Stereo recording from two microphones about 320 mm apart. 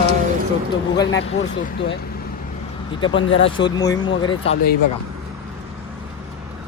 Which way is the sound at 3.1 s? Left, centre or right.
Left.